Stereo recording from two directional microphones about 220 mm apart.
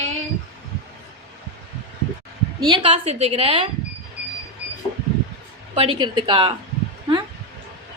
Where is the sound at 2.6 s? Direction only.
20° right (ahead or behind).